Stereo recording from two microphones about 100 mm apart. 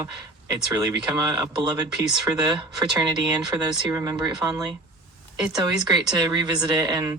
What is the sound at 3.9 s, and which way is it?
Speech, 30° right (ahead or behind).